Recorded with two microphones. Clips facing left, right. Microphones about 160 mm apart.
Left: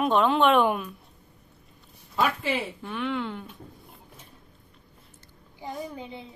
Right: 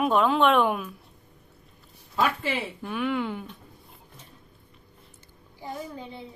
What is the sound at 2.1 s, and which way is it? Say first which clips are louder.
Speech: even; centre (ahead or behind).